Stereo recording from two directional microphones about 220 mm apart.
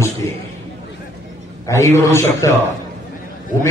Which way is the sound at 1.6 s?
15° left (ahead or behind).